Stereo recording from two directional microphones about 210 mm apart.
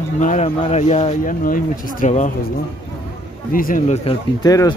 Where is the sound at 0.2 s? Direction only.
35° left (ahead or behind).